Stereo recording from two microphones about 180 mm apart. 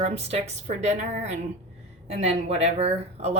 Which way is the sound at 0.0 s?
35° right (ahead or behind).